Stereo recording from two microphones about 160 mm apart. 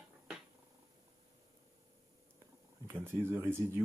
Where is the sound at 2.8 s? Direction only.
15° right (ahead or behind).